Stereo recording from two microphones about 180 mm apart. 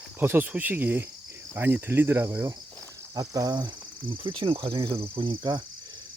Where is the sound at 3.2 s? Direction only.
20° right (ahead or behind).